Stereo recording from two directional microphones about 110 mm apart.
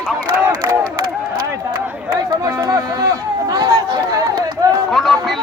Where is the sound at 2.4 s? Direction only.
30° right (ahead or behind).